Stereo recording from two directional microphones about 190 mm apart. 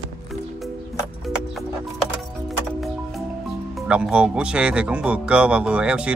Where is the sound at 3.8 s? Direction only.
5° right (ahead or behind).